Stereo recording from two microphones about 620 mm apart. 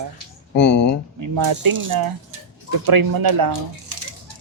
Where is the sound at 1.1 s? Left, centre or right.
Right.